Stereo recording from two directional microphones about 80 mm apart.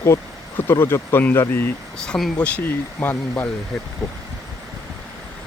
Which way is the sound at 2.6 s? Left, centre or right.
Left.